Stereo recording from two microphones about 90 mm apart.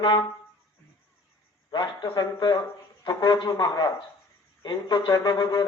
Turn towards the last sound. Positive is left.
turn(degrees=45)  # may be behind; listen again after turning